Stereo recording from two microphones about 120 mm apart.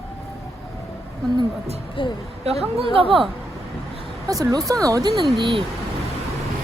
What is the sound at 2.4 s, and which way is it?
Speech, 60° right (ahead or behind).